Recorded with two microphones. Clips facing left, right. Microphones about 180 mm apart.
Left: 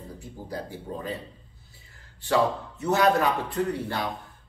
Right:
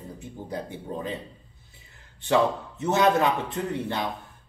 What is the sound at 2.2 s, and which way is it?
Speech, 20° right (ahead or behind).